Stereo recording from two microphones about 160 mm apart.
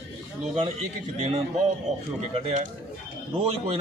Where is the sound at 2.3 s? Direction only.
40° right (ahead or behind).